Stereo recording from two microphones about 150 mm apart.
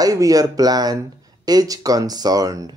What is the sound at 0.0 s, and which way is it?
Speech, 25° right (ahead or behind).